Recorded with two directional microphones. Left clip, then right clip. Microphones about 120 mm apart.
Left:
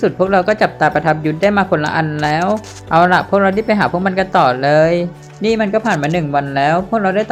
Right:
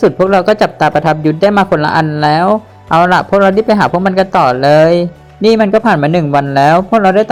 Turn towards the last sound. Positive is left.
turn(degrees=-25)  # may be behind; listen again after turning